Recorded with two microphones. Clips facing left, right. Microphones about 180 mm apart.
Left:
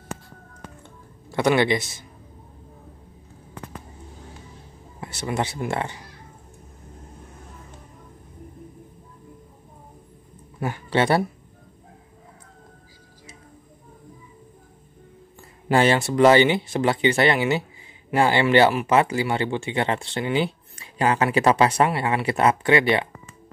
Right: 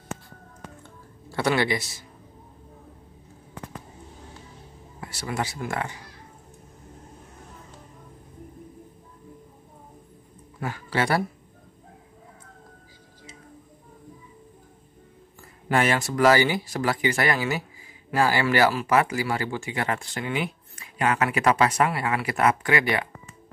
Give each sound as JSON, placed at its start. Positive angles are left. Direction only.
{"t": 1.3, "sound": "speech", "side_deg": 20}
{"t": 5.0, "sound": "speech", "side_deg": 25}
{"t": 10.6, "sound": "speech", "side_deg": 25}
{"t": 15.7, "sound": "speech", "side_deg": 30}